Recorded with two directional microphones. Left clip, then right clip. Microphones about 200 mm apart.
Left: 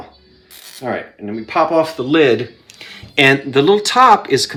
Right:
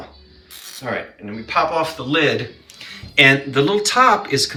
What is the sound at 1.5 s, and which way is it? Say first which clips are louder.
A man's voice: left 4 dB; 50° left (ahead or behind).